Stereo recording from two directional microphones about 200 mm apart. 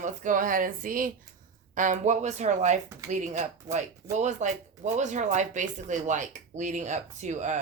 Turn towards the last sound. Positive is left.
turn(degrees=-35)  # may be behind; listen again after turning